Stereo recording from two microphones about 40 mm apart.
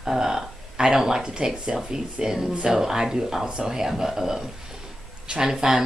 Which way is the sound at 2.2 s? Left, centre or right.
Centre.